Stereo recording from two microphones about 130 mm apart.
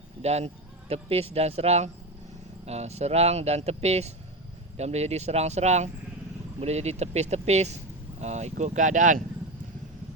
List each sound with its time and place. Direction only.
0.2 s speech: 55° right (ahead or behind); by 9.2 s 90° right